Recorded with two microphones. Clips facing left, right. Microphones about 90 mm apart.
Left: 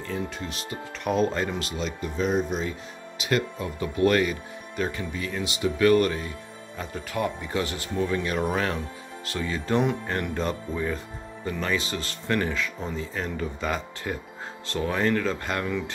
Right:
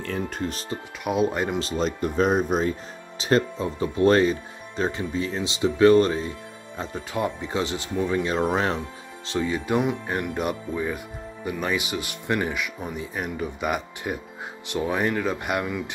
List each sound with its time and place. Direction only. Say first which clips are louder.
0.0 s speech: right 3 dB; 55° right (ahead or behind); by 0.7 s 40° right (ahead or behind)
1.0 s speech: right 1 dB; 5° right (ahead or behind)
1.6 s speech: right 6 dB; 35° right (ahead or behind)
3.2 s speech: right 4 dB; 35° right (ahead or behind); by 15.8 s 15° right (ahead or behind)